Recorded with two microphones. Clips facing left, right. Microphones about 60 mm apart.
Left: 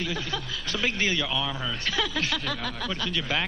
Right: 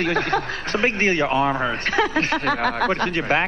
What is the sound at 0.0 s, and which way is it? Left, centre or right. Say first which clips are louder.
Speech: right 11 dB; right.